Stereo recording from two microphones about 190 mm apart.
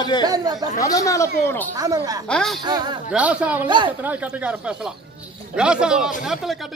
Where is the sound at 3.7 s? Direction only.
25° right (ahead or behind).